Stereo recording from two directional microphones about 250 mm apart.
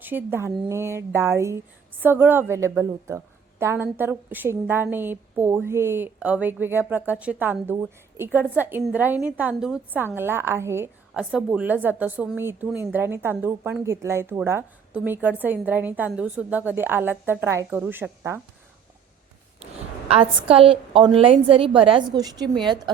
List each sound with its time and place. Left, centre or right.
0.0 s a woman's voice: centre
20.1 s a woman's voice: right